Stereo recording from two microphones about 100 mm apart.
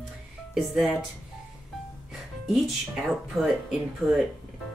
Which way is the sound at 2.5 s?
Centre (ahead or behind).